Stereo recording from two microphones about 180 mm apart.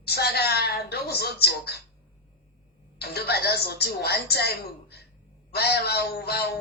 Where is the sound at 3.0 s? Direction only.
60° left (ahead or behind).